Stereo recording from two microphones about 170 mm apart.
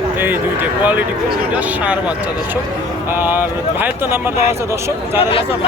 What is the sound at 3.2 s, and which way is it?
Speech, 10° right (ahead or behind).